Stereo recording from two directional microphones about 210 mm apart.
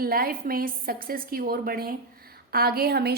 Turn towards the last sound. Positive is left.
turn(degrees=-50)  # may be behind; listen again after turning